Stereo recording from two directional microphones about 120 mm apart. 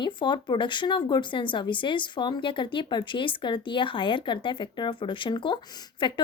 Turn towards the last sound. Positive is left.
turn(degrees=40)  # may be behind; listen again after turning